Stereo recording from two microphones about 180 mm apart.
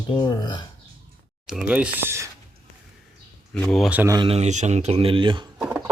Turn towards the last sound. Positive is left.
turn(degrees=-15)  # may be behind; listen again after turning